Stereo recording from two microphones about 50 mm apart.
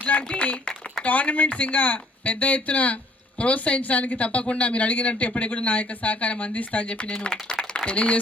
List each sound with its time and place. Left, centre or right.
0.0 s a sound: left
0.3 s speech: left
7.9 s speech: left